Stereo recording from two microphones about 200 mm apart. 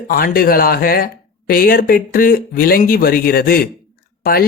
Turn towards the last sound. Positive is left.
turn(degrees=50)  # may be behind; listen again after turning